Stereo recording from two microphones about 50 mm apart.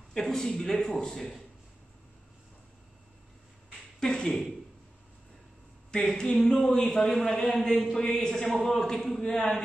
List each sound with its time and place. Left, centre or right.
0.1 s a man's voice: centre
4.0 s a man's voice: centre
5.9 s a man's voice: centre